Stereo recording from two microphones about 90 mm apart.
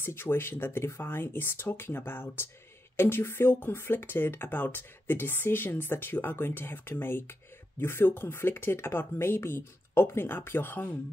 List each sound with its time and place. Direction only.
0.0 s speech: 25° left (ahead or behind)